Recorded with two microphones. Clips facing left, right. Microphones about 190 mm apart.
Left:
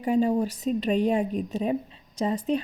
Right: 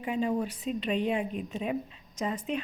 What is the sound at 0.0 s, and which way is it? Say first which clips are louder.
Speech: left 6 dB; 40° left (ahead or behind).